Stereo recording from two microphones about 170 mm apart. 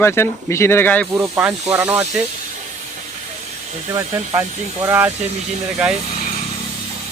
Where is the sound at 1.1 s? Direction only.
15° right (ahead or behind).